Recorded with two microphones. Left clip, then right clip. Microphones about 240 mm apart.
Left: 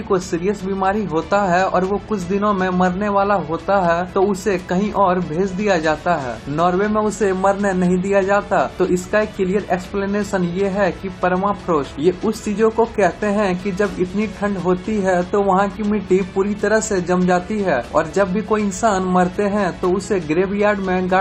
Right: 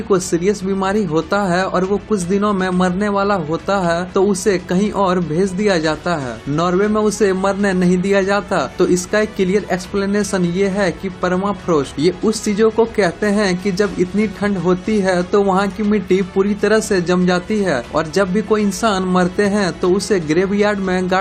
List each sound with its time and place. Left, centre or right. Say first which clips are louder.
0.1 s a man's voice: right 3 dB; right